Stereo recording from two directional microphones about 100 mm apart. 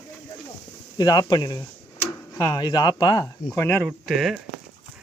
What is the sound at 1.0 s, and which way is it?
Speech, 40° left (ahead or behind).